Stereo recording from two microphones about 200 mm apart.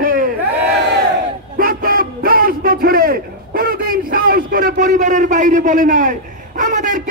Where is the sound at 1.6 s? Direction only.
45° right (ahead or behind).